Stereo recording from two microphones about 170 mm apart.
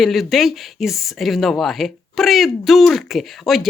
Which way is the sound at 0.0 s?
Centre (ahead or behind).